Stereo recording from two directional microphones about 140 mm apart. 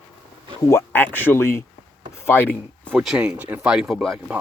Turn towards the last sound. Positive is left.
turn(degrees=0)  # may be behind; listen again after turning